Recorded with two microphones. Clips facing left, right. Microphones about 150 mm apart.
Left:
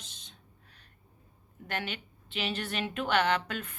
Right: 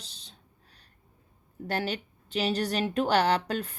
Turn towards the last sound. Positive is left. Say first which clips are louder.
# right 4 dB
turn(degrees=-35)  # may be behind; listen again after turning